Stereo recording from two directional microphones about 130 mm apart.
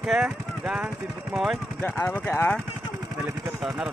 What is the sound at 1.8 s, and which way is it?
Speech, 15° left (ahead or behind).